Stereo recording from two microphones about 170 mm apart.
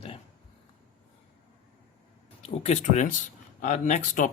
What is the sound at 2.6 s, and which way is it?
Speech, 40° left (ahead or behind).